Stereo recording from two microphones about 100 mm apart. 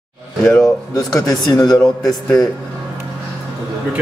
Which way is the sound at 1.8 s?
10° left (ahead or behind).